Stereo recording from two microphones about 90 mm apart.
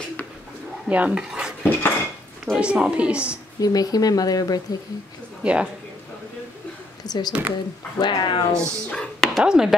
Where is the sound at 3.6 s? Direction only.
45° left (ahead or behind).